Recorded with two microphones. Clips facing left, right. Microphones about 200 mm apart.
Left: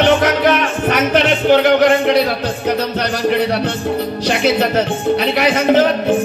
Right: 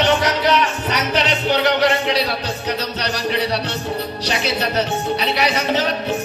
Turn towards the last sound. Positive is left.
turn(degrees=50)  # may be behind; listen again after turning